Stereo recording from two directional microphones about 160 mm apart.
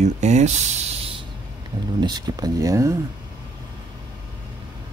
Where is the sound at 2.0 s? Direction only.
25° right (ahead or behind).